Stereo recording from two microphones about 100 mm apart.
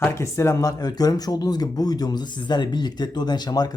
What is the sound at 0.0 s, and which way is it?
Speech, 30° left (ahead or behind).